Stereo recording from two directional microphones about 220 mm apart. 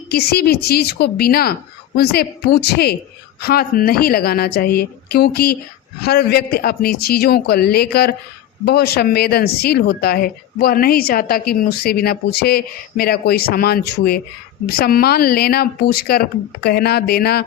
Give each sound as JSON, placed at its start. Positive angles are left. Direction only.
{"t": 0.1, "sound": "a woman's voice", "side_deg": 45}